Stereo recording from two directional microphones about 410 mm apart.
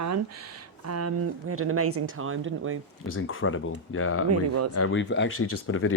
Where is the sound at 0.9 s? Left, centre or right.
Right.